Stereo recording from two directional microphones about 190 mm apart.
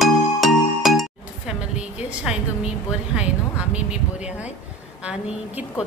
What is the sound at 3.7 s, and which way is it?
Speech, 5° right (ahead or behind).